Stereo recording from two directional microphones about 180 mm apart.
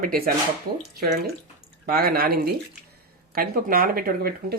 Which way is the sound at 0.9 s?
60° right (ahead or behind).